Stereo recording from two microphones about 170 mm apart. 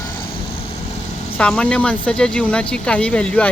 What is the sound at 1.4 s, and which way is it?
Speech, 5° left (ahead or behind).